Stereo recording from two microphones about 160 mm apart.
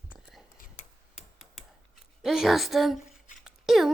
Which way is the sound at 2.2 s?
Centre (ahead or behind).